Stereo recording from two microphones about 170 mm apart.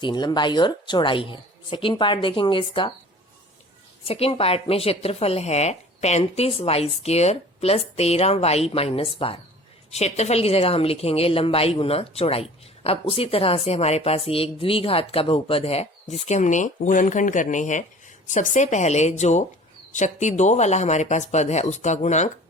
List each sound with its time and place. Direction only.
0.0 s speech: 25° left (ahead or behind)
4.0 s a woman's voice: 35° left (ahead or behind)